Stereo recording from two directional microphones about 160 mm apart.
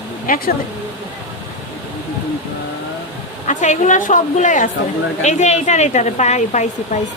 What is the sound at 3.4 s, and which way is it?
Speech, 50° left (ahead or behind).